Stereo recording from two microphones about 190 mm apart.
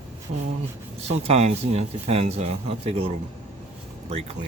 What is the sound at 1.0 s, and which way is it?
Speech, 35° right (ahead or behind).